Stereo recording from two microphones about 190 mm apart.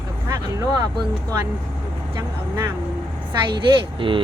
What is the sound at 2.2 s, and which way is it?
Speech, 20° right (ahead or behind).